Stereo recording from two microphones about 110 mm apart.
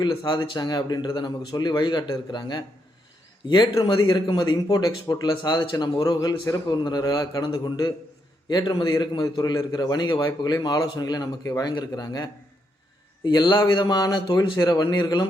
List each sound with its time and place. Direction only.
0.2 s a man's voice: 40° left (ahead or behind)